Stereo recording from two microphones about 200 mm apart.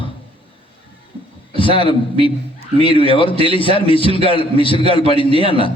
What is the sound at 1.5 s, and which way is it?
Speech, 25° left (ahead or behind).